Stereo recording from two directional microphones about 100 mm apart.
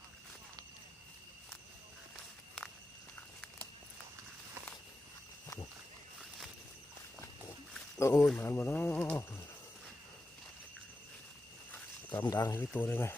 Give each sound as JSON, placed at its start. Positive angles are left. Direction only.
{"t": 7.9, "sound": "speech", "side_deg": 30}
{"t": 12.1, "sound": "speech", "side_deg": 40}
{"t": 12.5, "sound": "speech", "side_deg": 20}